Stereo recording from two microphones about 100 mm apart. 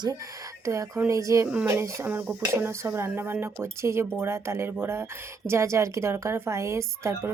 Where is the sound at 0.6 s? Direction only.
30° right (ahead or behind).